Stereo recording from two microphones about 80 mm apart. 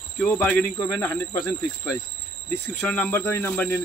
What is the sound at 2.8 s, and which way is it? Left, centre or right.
Speech, centre.